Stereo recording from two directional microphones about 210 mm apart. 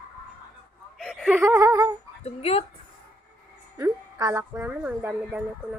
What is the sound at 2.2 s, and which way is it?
Speech, 30° left (ahead or behind).